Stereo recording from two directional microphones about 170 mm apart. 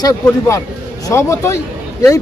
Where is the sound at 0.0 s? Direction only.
20° left (ahead or behind).